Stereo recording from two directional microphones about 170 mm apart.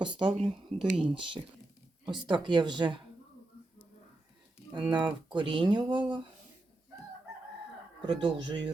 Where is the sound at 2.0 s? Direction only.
25° right (ahead or behind).